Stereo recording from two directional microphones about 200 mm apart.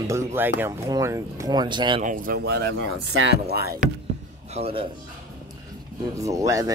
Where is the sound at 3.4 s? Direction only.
50° right (ahead or behind).